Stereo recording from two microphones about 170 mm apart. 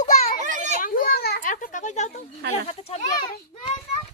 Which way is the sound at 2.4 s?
70° right (ahead or behind).